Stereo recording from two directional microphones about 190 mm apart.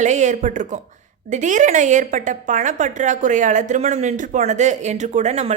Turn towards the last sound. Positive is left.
turn(degrees=-35)  # may be behind; listen again after turning